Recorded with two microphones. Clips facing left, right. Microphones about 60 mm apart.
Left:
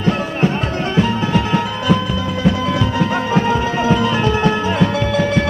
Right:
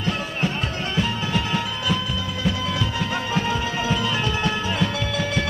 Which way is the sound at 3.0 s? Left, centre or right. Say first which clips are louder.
Left 8 dB; left.